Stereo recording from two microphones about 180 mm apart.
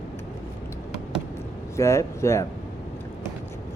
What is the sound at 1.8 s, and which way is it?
Speech, 15° left (ahead or behind).